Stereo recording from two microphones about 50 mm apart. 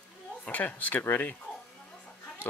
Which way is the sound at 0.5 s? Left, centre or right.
Left.